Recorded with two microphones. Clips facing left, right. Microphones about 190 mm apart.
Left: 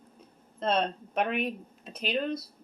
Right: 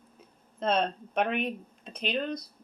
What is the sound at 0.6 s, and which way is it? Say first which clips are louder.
Speech: even; centre (ahead or behind).